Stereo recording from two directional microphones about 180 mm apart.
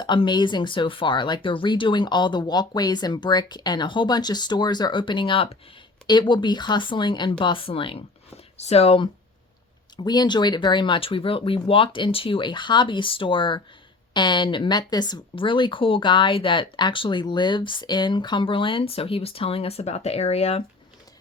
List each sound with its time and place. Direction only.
0.0 s speech: 25° left (ahead or behind)